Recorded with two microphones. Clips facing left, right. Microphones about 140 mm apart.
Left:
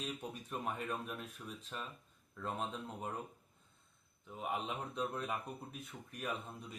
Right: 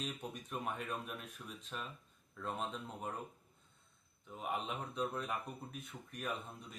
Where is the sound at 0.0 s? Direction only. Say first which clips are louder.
Even; centre (ahead or behind).